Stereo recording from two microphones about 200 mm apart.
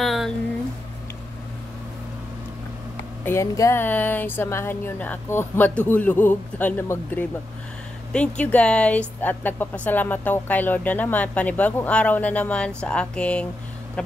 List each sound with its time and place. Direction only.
0.0 s a sound: centre (ahead or behind)
3.3 s speech: 15° left (ahead or behind)
8.4 s speech: 5° left (ahead or behind)